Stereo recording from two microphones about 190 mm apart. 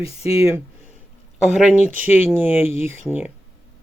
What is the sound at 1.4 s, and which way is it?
Speech, centre (ahead or behind).